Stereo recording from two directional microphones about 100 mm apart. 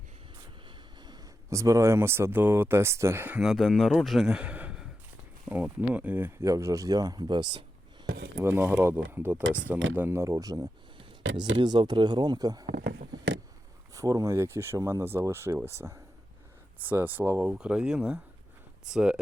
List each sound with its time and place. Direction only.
1.5 s speech: 30° right (ahead or behind)
3.4 s a man's voice: centre (ahead or behind); by 6.3 s 20° right (ahead or behind)
6.4 s speech: 30° right (ahead or behind); by 7.6 s 50° right (ahead or behind)
8.4 s speech: 20° right (ahead or behind); by 12.6 s 40° right (ahead or behind)
13.9 s speech: 35° right (ahead or behind); by 17.5 s 20° right (ahead or behind)
17.5 s speech: 10° right (ahead or behind)